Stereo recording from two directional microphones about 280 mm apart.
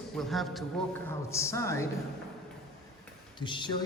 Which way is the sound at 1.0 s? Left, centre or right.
Centre.